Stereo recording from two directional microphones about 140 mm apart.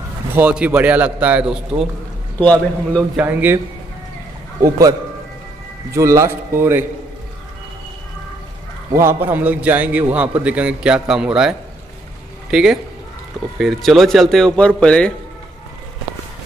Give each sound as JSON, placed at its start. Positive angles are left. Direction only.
{"t": 0.4, "sound": "a man's voice", "side_deg": -10}
{"t": 2.4, "sound": "a man's voice", "side_deg": 10}
{"t": 3.0, "sound": "a man's voice", "side_deg": -10}
{"t": 4.6, "sound": "a man's voice", "side_deg": -25}
{"t": 8.9, "sound": "a man's voice", "side_deg": -15}